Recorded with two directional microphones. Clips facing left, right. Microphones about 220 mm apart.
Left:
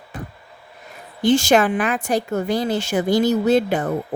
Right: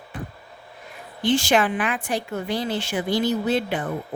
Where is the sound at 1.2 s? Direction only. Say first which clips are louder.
Left 5 dB; 45° left (ahead or behind).